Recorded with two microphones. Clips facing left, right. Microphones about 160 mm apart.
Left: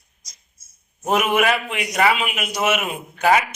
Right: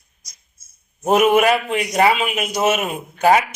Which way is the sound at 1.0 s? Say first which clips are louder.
Right 5 dB; 40° right (ahead or behind).